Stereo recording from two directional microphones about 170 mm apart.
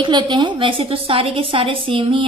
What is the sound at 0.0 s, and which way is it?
A woman's voice, 25° right (ahead or behind).